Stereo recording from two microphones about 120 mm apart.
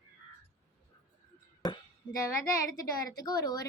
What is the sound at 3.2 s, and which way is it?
Speech, 35° left (ahead or behind).